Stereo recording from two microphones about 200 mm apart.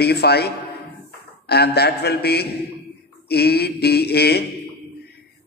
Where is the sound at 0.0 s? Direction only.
55° left (ahead or behind).